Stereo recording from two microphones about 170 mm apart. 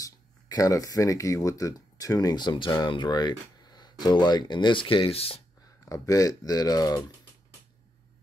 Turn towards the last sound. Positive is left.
turn(degrees=20)  # may be behind; listen again after turning